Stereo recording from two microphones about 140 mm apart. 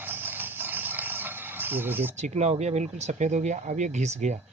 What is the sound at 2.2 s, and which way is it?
Speech, 50° right (ahead or behind).